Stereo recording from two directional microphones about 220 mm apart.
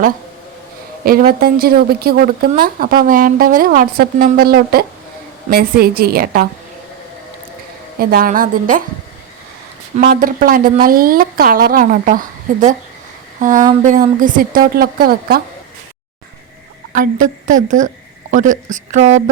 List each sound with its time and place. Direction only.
1.0 s a woman's voice: 40° right (ahead or behind)
7.9 s a woman's voice: 40° right (ahead or behind)
10.0 s a woman's voice: 40° right (ahead or behind)
16.9 s a woman's voice: 35° right (ahead or behind)